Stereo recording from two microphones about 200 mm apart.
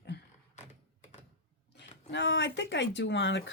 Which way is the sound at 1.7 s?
60° left (ahead or behind).